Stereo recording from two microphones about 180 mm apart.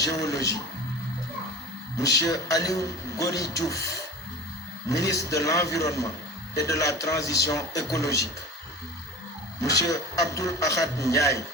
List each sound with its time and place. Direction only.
0.0 s a man's voice: 20° left (ahead or behind)
2.0 s a man's voice: 20° left (ahead or behind)
5.0 s a man's voice: 20° left (ahead or behind)
9.6 s a man's voice: 20° left (ahead or behind)